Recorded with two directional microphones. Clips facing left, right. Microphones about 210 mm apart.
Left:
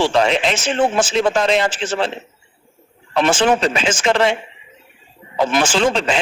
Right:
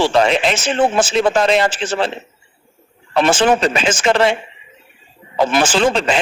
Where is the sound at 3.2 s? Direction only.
45° right (ahead or behind).